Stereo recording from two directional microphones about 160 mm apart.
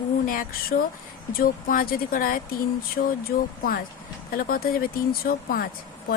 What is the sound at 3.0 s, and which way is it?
Speech, 90° left.